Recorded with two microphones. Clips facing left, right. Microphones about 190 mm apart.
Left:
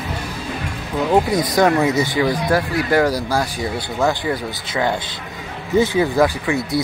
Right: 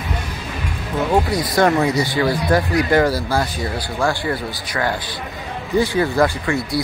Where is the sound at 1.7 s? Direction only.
Centre (ahead or behind); by 4.4 s 20° left (ahead or behind).